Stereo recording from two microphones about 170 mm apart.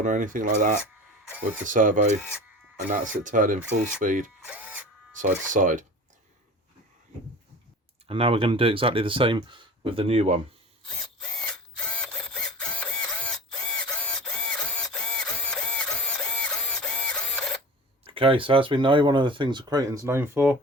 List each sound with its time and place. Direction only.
0.0 s speech: 50° right (ahead or behind)
3.2 s speech: 50° right (ahead or behind)
4.4 s tools: 10° right (ahead or behind)
5.1 s speech: 50° right (ahead or behind)
8.0 s speech: 35° right (ahead or behind)
11.3 s mechanisms: 5° left (ahead or behind)
16.2 s printer: 5° left (ahead or behind)
18.0 s speech: 30° right (ahead or behind); by 20.6 s 15° right (ahead or behind)